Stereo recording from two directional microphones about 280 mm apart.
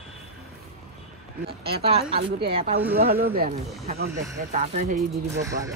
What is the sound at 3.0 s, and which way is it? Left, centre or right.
A woman's voice, right.